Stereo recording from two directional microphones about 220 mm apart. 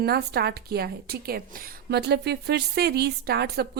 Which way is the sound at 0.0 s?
45° right (ahead or behind).